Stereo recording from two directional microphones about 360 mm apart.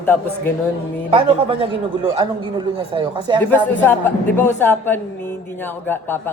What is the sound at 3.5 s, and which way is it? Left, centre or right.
Speech, centre.